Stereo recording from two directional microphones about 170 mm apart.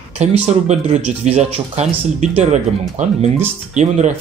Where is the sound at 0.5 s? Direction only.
40° right (ahead or behind).